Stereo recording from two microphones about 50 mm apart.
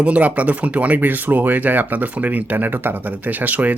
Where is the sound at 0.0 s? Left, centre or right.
Right.